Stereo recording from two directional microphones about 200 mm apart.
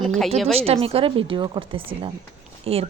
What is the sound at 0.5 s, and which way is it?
A woman's voice, 30° right (ahead or behind).